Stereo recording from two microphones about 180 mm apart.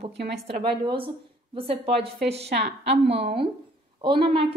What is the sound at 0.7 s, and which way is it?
A woman's voice, 30° right (ahead or behind).